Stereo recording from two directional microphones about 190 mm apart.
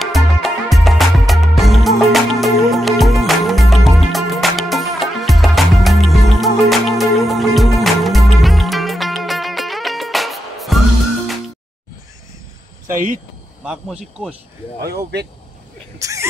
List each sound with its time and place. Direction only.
0.0 s music: centre (ahead or behind)
13.7 s speech: 5° right (ahead or behind)
14.8 s speech: 55° right (ahead or behind)
16.0 s speech: 15° right (ahead or behind)